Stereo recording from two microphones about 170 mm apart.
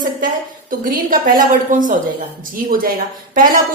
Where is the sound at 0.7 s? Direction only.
55° right (ahead or behind).